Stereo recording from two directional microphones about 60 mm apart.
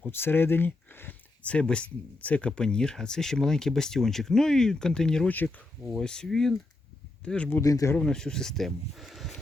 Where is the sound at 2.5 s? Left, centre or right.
Centre.